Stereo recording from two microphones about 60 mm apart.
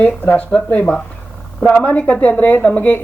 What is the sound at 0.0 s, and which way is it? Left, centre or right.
A woman's voice, left.